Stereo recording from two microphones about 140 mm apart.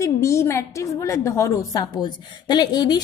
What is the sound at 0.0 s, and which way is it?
A woman's voice, 20° left (ahead or behind).